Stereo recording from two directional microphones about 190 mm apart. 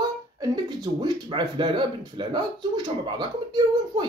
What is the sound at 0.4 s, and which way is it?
A man's voice, 20° right (ahead or behind).